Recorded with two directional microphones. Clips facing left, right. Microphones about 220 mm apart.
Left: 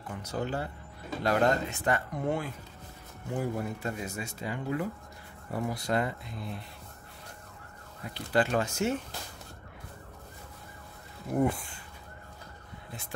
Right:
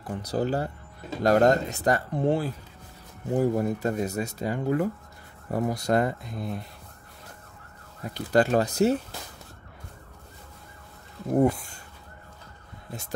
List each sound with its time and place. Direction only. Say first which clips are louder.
0.0 s speech: right 7 dB; 35° right (ahead or behind)
8.0 s speech: right 6 dB; 45° right (ahead or behind)